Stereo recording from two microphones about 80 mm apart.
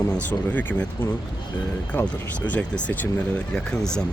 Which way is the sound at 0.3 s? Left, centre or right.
Left.